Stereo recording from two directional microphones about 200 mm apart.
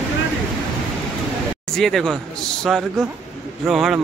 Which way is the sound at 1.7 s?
Centre (ahead or behind).